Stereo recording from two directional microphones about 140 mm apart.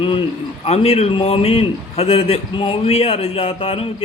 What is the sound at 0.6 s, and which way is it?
A man's voice, 45° left (ahead or behind).